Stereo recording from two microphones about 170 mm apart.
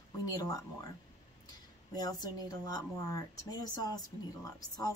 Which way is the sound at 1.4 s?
25° left (ahead or behind).